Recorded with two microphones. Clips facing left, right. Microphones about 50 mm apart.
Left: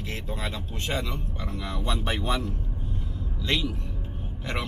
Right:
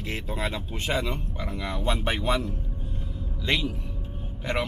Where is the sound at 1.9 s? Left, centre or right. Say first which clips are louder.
Right 2 dB; centre.